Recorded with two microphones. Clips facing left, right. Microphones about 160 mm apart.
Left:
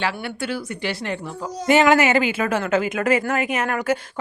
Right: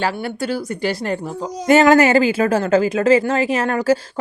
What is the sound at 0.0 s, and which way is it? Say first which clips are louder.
A woman's voice: right 4 dB; 40° right (ahead or behind).